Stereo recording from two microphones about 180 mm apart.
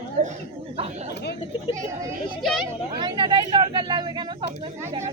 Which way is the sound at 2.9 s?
25° right (ahead or behind).